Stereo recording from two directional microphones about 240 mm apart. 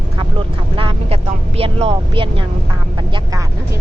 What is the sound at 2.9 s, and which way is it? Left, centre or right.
Speech, centre.